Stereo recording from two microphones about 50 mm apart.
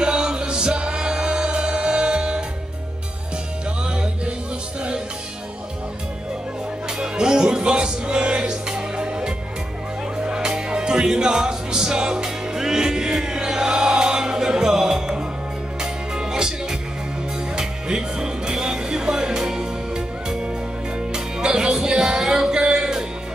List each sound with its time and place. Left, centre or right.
0.0 s music: centre
7.0 s music: centre
17.6 s music: centre
21.1 s music: centre